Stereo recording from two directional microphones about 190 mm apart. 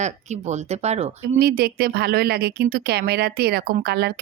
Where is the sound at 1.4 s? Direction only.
55° right (ahead or behind).